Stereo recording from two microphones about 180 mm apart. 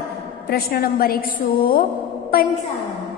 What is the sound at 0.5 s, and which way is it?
A woman's voice, 60° left (ahead or behind).